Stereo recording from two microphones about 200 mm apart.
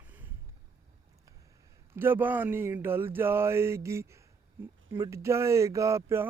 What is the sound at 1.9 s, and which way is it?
Speech, 10° right (ahead or behind).